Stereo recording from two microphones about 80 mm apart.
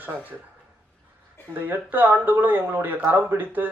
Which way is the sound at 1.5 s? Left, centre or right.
Right.